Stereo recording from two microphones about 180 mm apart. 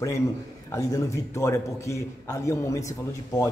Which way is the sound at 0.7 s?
15° left (ahead or behind).